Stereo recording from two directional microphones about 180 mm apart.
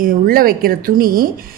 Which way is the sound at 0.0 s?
55° right (ahead or behind).